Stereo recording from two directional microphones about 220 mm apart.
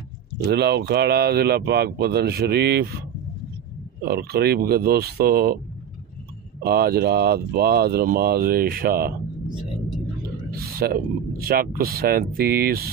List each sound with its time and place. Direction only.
0.5 s speech: 50° right (ahead or behind)
4.0 s speech: 45° right (ahead or behind)
6.6 s speech: 45° right (ahead or behind)
10.5 s speech: 45° right (ahead or behind)